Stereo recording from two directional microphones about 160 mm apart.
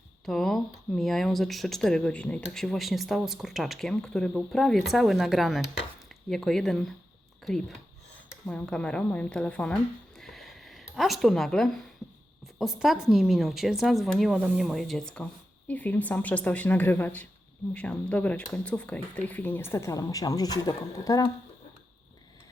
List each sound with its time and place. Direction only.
0.3 s a woman's voice: centre (ahead or behind)
10.2 s a sound: centre (ahead or behind)
12.5 s a woman's voice: centre (ahead or behind); by 21.2 s 20° left (ahead or behind)